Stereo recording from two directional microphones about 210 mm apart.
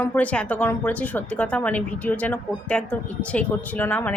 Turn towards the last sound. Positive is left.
turn(degrees=10)  # may be behind; listen again after turning